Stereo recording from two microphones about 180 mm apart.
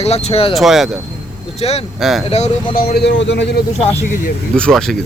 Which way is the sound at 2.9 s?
75° left (ahead or behind).